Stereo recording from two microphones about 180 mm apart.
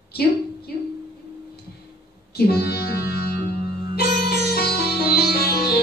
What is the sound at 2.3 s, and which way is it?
Music, 60° left (ahead or behind).